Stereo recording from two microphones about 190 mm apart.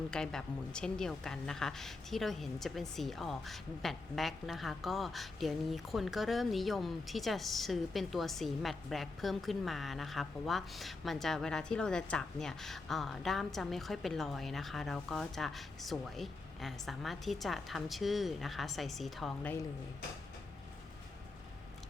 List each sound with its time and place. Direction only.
0.1 s a woman's voice: 5° left (ahead or behind)